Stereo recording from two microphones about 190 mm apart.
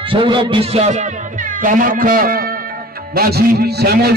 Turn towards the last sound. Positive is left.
turn(degrees=-55)  # may be behind; listen again after turning